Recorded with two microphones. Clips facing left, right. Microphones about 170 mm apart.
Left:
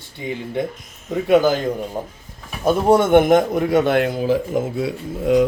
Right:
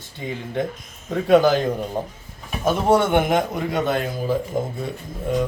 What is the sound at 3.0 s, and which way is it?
A man's voice, 45° left (ahead or behind).